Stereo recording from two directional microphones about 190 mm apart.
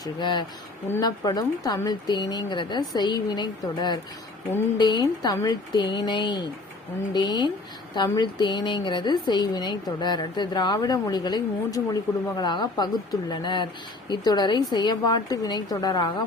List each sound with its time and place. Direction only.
0.0 s a woman's voice: 25° left (ahead or behind)